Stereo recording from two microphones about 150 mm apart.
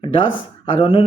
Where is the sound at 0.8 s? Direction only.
35° left (ahead or behind).